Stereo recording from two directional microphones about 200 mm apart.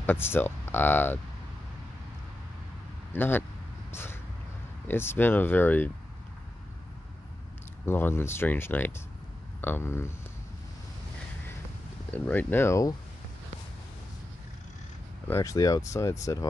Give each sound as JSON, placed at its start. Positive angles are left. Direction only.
{"t": 0.0, "sound": "speech", "side_deg": 10}
{"t": 3.1, "sound": "speech", "side_deg": 10}
{"t": 3.9, "sound": "a sound", "side_deg": 10}
{"t": 4.8, "sound": "speech", "side_deg": 10}
{"t": 7.8, "sound": "speech", "side_deg": 10}
{"t": 12.1, "sound": "speech", "side_deg": 10}
{"t": 15.2, "sound": "speech", "side_deg": 15}